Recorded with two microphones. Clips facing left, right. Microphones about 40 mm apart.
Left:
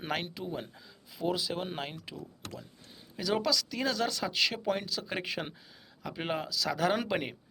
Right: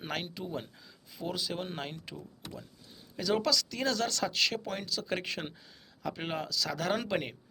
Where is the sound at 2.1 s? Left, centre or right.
Left.